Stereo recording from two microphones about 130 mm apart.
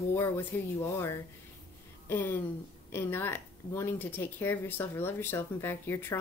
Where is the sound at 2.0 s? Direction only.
15° left (ahead or behind).